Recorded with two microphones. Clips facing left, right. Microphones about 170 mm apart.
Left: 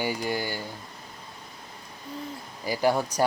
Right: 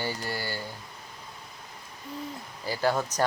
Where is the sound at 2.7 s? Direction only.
15° left (ahead or behind).